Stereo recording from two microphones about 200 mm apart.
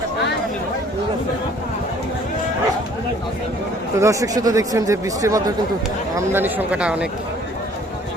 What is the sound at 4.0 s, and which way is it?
Speech, 15° right (ahead or behind).